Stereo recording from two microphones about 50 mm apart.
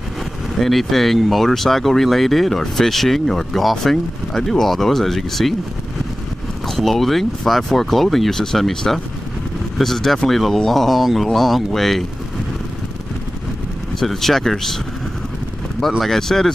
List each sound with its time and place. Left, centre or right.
0.6 s speech: centre
6.7 s speech: centre
13.9 s speech: centre
16.0 s speech: centre